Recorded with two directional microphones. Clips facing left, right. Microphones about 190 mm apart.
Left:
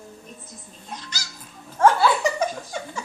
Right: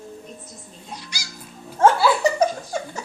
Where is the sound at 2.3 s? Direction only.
40° right (ahead or behind).